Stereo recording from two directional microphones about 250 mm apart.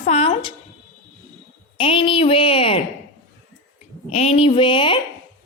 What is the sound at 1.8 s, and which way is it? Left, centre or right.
Speech, left.